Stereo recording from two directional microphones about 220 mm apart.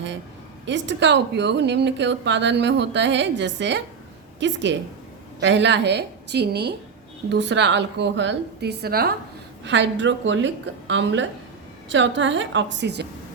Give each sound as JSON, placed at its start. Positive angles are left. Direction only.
{"t": 0.6, "sound": "a woman's voice", "side_deg": -55}
{"t": 9.6, "sound": "a woman's voice", "side_deg": -55}